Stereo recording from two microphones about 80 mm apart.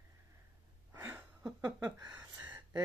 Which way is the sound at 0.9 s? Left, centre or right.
Right.